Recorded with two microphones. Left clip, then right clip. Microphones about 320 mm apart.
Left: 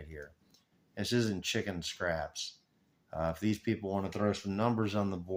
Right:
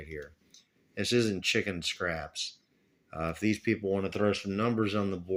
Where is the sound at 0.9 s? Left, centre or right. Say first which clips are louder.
Right 5 dB; centre.